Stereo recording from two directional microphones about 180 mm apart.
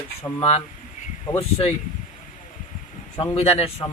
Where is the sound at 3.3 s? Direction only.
35° left (ahead or behind).